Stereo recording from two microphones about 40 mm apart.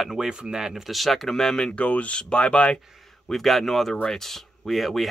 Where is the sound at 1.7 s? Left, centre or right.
Left.